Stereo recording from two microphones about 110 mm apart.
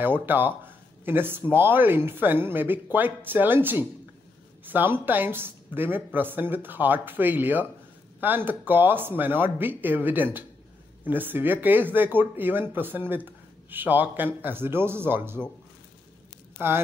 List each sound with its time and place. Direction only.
0.0 s speech: 20° right (ahead or behind)
16.5 s speech: 20° right (ahead or behind)